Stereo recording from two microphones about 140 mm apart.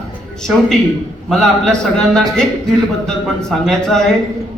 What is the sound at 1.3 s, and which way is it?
A man's voice, 5° left (ahead or behind).